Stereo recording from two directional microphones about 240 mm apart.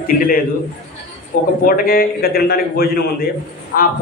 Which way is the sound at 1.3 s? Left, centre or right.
Left.